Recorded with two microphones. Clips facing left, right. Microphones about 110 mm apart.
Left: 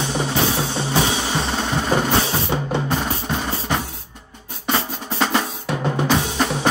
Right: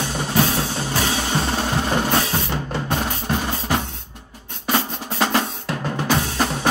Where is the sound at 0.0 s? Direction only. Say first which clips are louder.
Even; 25° left (ahead or behind).